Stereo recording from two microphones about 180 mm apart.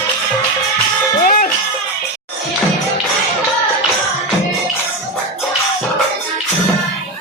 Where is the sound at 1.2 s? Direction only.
50° left (ahead or behind).